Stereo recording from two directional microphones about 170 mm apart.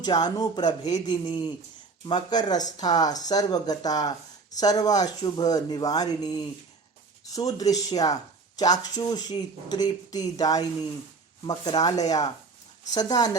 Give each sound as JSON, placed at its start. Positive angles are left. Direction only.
{"t": 0.0, "sound": "speech", "side_deg": 25}